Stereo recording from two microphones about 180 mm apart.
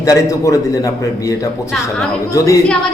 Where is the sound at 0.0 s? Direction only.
20° left (ahead or behind).